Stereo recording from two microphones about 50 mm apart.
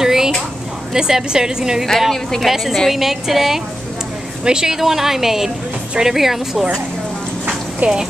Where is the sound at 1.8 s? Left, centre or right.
Centre.